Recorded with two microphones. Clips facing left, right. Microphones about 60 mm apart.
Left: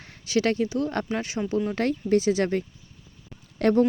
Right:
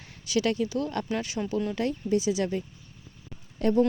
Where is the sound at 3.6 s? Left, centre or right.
Left.